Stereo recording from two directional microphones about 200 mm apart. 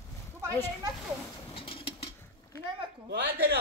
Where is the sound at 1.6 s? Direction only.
25° left (ahead or behind).